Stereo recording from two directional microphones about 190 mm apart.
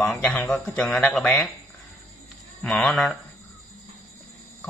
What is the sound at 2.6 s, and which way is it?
Speech, centre (ahead or behind).